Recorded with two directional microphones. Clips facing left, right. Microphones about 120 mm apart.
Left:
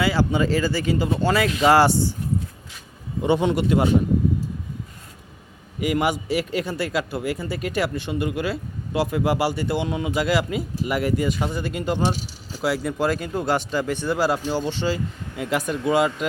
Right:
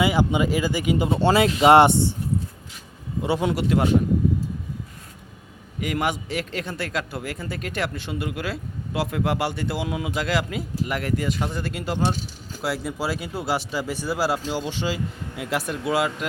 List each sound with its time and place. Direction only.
0.0 s speech: 20° right (ahead or behind)
3.2 s speech: centre (ahead or behind)
5.8 s speech: 5° left (ahead or behind)